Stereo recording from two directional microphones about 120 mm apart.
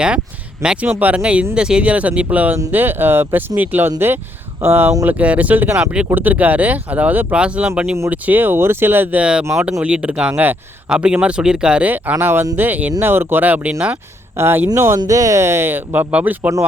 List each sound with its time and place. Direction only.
0.6 s speech: 10° right (ahead or behind)
14.9 s speech: 30° right (ahead or behind); by 16.5 s 15° right (ahead or behind)